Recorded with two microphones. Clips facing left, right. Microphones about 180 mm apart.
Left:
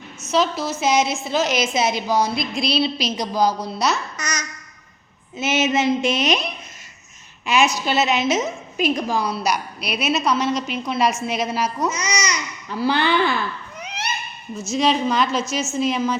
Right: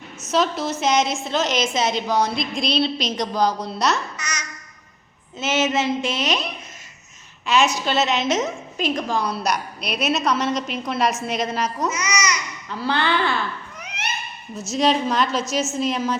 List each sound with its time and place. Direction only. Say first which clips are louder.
0.3 s a woman's voice: left 1 dB; centre (ahead or behind)
4.2 s speech: left 3 dB; 40° left (ahead or behind)
5.4 s a woman's voice: left 1 dB; 15° left (ahead or behind)
11.9 s speech: even; 35° left (ahead or behind)
12.8 s a woman's voice: left 3 dB; 15° left (ahead or behind)
13.7 s a sound: left 2 dB; 30° left (ahead or behind)
14.5 s a woman's voice: even; centre (ahead or behind)